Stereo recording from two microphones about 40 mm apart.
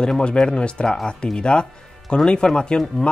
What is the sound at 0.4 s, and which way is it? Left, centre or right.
Speech, left.